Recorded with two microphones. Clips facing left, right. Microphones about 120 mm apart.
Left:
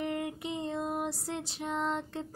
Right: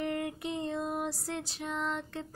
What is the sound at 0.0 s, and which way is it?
Female singing, 15° left (ahead or behind).